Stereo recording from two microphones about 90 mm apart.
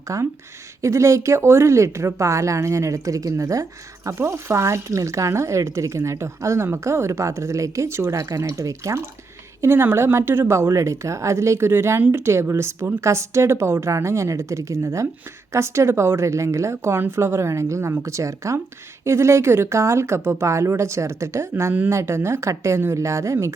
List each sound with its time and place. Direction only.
0.1 s speech: 35° right (ahead or behind)
21.5 s speech: 20° right (ahead or behind)